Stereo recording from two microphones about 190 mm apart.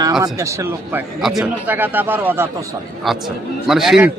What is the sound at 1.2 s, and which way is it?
A man's voice, centre (ahead or behind).